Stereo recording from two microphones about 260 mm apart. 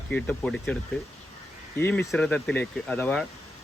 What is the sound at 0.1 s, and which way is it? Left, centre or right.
Speech, centre.